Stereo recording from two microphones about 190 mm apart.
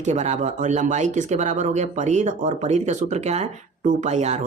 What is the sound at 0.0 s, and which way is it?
Speech, 35° right (ahead or behind).